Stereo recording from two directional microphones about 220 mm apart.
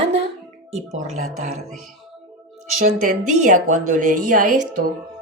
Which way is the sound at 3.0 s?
35° right (ahead or behind).